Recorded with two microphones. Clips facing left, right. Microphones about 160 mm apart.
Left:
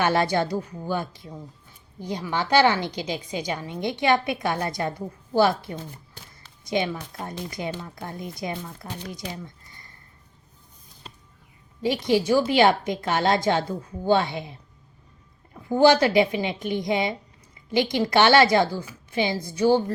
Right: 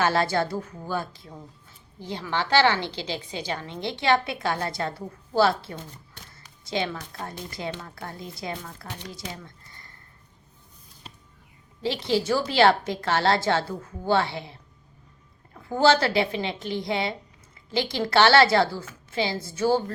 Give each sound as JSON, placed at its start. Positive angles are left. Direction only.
{"t": 0.0, "sound": "a woman's voice", "side_deg": 20}
{"t": 9.1, "sound": "a sound", "side_deg": 20}
{"t": 11.8, "sound": "a woman's voice", "side_deg": 15}
{"t": 15.7, "sound": "a woman's voice", "side_deg": 15}